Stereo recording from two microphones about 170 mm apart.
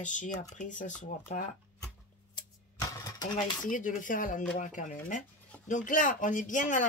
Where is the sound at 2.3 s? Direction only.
20° left (ahead or behind).